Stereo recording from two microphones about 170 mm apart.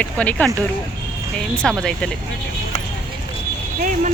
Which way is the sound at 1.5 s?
5° left (ahead or behind).